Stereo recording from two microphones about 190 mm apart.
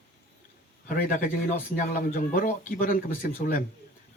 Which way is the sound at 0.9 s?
45° left (ahead or behind).